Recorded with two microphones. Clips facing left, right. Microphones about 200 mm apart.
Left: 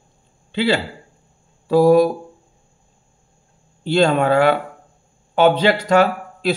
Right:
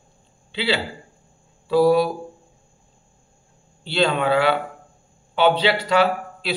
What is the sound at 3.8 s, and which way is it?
Speech, 45° left (ahead or behind).